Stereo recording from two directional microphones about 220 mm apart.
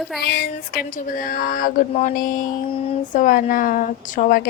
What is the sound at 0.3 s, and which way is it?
A woman's voice, 45° left (ahead or behind).